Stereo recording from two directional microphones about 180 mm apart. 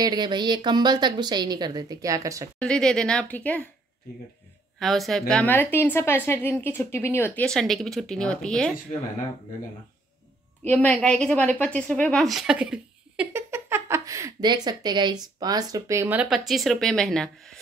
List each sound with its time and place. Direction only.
0.0 s speech: 25° right (ahead or behind)
2.6 s speech: 5° left (ahead or behind)
4.7 s a woman's voice: centre (ahead or behind)
10.6 s a woman's voice: 10° left (ahead or behind)